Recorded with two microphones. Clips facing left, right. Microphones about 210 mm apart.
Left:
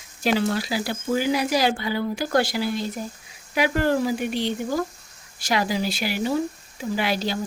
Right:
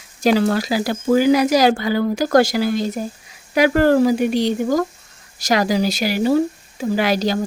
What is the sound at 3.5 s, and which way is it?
Speech, 90° right.